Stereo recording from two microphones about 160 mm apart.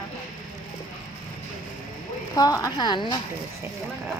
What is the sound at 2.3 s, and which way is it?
Speech, 20° left (ahead or behind).